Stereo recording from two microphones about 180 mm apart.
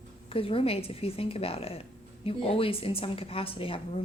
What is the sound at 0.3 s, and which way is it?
A woman's voice, 30° left (ahead or behind).